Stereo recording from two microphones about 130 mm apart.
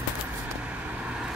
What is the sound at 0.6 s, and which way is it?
Vehicle, 10° right (ahead or behind).